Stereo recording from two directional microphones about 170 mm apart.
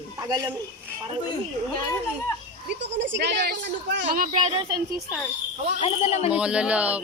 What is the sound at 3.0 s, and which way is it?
Speech, 90° right.